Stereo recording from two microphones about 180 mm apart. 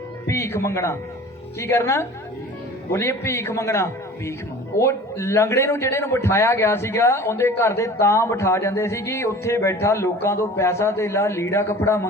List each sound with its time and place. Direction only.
0.3 s a man's voice: 15° left (ahead or behind)